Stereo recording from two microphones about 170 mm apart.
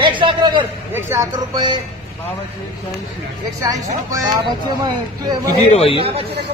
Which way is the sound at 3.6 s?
20° right (ahead or behind).